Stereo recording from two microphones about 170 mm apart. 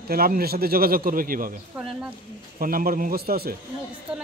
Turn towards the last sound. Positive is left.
turn(degrees=-60)  # may be behind; listen again after turning